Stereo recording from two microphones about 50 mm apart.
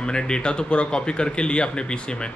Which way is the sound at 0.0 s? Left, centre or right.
Centre.